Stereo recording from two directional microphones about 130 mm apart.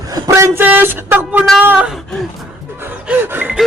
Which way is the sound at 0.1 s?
25° right (ahead or behind).